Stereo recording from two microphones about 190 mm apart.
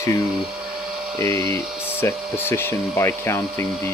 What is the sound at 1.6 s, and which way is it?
Tools, 5° right (ahead or behind).